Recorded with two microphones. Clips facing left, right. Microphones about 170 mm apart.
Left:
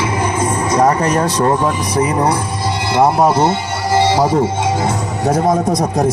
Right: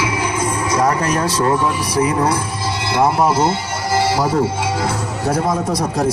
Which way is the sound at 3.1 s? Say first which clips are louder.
Left 3 dB; 20° left (ahead or behind).